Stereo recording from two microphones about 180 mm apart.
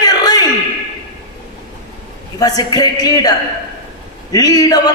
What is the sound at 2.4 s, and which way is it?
Speech, 20° left (ahead or behind).